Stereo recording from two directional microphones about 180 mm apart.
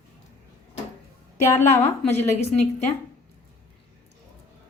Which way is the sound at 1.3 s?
15° left (ahead or behind).